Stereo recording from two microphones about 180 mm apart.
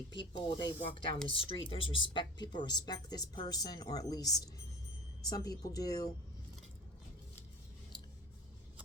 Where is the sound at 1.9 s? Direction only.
25° left (ahead or behind).